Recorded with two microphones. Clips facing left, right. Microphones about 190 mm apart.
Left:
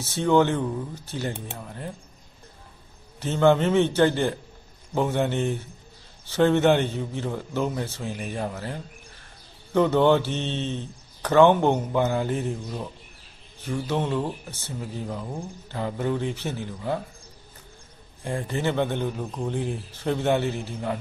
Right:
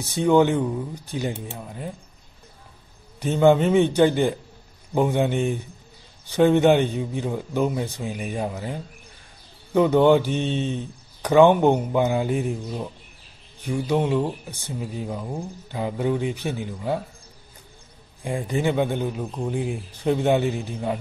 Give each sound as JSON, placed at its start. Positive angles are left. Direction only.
{"t": 0.0, "sound": "speech", "side_deg": -15}
{"t": 3.2, "sound": "speech", "side_deg": -15}
{"t": 18.2, "sound": "speech", "side_deg": -15}